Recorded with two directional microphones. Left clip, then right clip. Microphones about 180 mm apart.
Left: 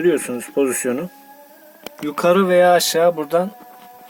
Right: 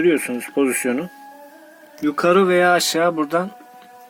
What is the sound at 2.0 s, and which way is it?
Speech, 10° left (ahead or behind).